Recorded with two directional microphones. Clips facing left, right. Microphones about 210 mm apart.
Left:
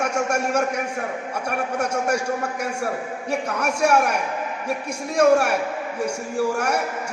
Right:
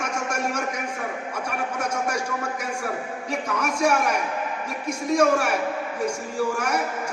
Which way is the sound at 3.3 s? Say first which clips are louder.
Left 2 dB; 65° left (ahead or behind).